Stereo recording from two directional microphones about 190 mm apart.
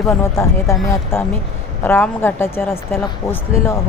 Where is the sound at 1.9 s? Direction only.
10° left (ahead or behind).